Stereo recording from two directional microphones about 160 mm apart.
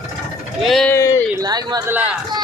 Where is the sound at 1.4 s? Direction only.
25° right (ahead or behind).